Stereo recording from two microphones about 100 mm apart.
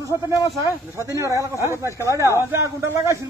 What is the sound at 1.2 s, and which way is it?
A man's voice, 30° right (ahead or behind).